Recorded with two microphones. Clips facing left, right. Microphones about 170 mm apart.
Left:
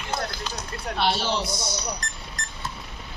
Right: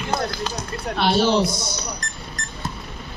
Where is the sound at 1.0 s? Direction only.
50° right (ahead or behind).